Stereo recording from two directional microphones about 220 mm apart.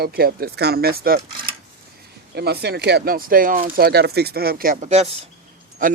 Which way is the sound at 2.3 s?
45° right (ahead or behind).